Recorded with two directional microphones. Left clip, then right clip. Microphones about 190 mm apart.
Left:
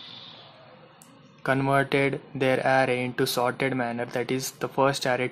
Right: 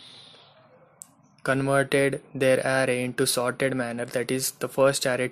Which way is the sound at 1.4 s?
35° right (ahead or behind).